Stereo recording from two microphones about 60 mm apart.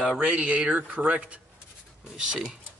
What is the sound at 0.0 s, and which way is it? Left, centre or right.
Speech, centre.